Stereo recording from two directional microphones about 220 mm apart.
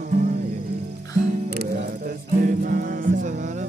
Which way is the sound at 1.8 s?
35° right (ahead or behind).